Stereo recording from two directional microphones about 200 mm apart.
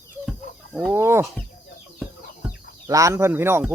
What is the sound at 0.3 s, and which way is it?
Chicken, centre (ahead or behind).